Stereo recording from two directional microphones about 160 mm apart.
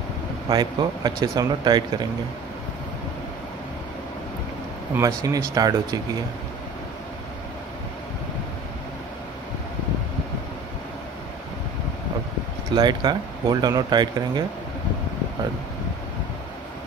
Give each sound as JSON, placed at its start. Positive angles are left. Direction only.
{"t": 0.5, "sound": "speech", "side_deg": -25}
{"t": 4.9, "sound": "speech", "side_deg": -20}
{"t": 12.7, "sound": "speech", "side_deg": -25}